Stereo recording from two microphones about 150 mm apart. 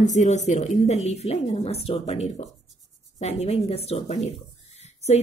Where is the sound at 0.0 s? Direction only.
50° left (ahead or behind).